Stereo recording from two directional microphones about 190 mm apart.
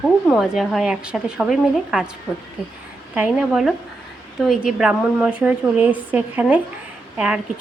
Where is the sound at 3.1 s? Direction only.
5° right (ahead or behind).